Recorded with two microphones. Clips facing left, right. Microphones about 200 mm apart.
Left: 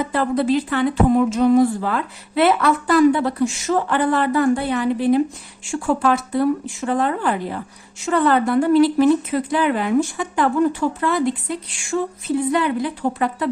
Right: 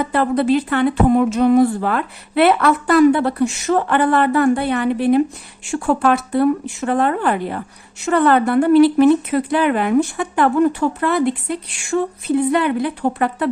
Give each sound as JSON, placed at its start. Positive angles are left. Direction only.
{"t": 0.0, "sound": "speech", "side_deg": -60}